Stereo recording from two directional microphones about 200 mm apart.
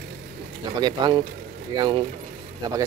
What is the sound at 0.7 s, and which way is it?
Speech, 20° right (ahead or behind).